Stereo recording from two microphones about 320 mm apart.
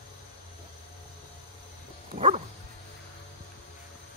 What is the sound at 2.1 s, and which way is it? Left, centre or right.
Dog, centre.